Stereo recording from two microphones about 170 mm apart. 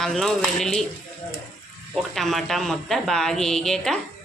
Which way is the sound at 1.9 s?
Centre (ahead or behind).